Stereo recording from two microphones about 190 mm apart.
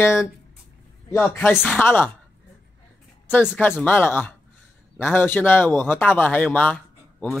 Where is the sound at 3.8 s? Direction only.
10° left (ahead or behind).